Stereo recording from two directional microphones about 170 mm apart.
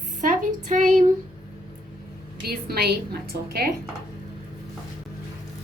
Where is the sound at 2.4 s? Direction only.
65° right (ahead or behind).